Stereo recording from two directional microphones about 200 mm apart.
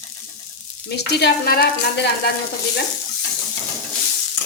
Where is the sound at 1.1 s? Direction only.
50° left (ahead or behind).